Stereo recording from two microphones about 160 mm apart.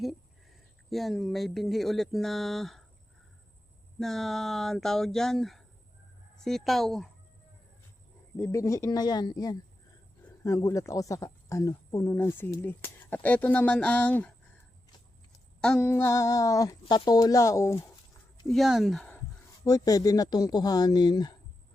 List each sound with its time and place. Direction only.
0.9 s speech: centre (ahead or behind)
4.0 s speech: centre (ahead or behind)
8.4 s speech: 20° left (ahead or behind)
15.3 s a sound: 5° left (ahead or behind)
15.9 s speech: 15° left (ahead or behind)
18.4 s speech: centre (ahead or behind)
19.6 s speech: 20° left (ahead or behind)